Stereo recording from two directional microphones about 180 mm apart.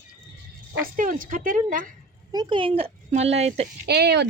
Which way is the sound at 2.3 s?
30° right (ahead or behind).